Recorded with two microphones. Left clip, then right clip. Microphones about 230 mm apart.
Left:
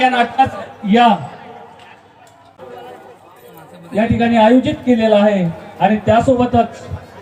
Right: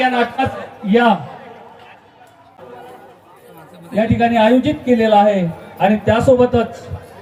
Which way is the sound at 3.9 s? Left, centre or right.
Right.